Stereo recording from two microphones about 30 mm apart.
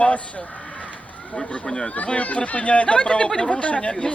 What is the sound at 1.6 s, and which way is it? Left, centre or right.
Speech, centre.